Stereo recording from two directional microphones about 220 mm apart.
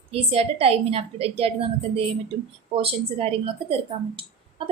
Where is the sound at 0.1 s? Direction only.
25° right (ahead or behind).